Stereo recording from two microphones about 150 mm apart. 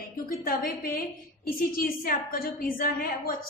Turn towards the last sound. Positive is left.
turn(degrees=75)  # may be behind; listen again after turning